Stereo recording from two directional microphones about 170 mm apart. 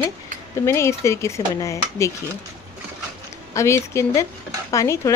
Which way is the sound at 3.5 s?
15° left (ahead or behind).